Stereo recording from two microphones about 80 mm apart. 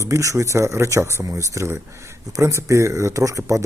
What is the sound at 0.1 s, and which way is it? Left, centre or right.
Speech, right.